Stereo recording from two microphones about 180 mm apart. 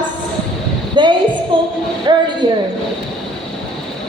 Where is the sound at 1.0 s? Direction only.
25° right (ahead or behind).